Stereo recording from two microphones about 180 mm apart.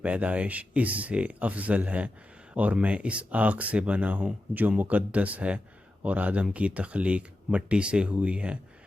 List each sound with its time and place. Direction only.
0.0 s speech: 5° right (ahead or behind)